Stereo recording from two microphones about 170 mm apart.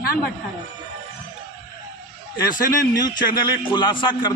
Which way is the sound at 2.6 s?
20° left (ahead or behind).